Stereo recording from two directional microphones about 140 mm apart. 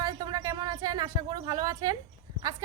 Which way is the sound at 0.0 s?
25° right (ahead or behind).